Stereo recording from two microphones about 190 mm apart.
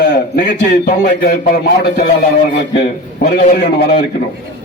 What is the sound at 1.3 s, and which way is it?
Speech, 45° left (ahead or behind).